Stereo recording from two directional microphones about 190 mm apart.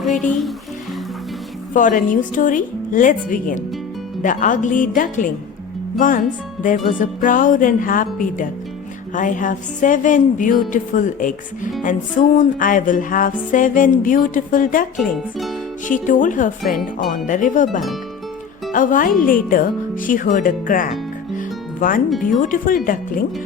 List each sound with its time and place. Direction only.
0.1 s speech: 40° left (ahead or behind)
1.7 s music: 45° left (ahead or behind)
6.6 s music: 45° left (ahead or behind)
14.9 s speech: centre (ahead or behind)
15.9 s music: 45° left (ahead or behind)